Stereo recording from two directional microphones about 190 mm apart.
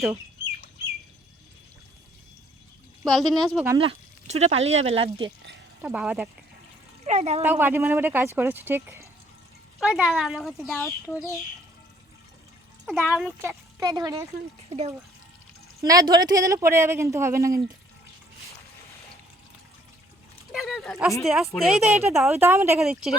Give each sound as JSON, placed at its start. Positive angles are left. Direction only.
{"t": 3.0, "sound": "speech", "side_deg": 0}
{"t": 3.8, "sound": "speech", "side_deg": -30}
{"t": 5.8, "sound": "speech", "side_deg": -5}
{"t": 7.0, "sound": "speech", "side_deg": -35}
{"t": 7.4, "sound": "speech", "side_deg": -10}
{"t": 9.8, "sound": "speech", "side_deg": 0}
{"t": 12.8, "sound": "speech", "side_deg": -5}
{"t": 13.4, "sound": "speech", "side_deg": -15}
{"t": 14.7, "sound": "speech", "side_deg": -35}
{"t": 15.8, "sound": "speech", "side_deg": -20}
{"t": 20.5, "sound": "speech", "side_deg": 0}
{"t": 22.8, "sound": "speech", "side_deg": 0}